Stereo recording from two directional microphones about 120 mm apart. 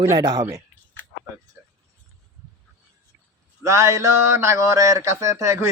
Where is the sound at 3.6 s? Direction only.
25° right (ahead or behind).